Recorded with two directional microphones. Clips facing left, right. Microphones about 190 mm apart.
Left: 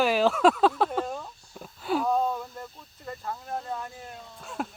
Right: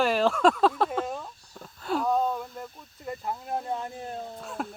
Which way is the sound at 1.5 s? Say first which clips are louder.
Left 1 dB; 5° left (ahead or behind).